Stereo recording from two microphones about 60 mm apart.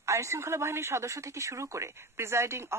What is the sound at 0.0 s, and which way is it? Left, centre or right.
Speech, right.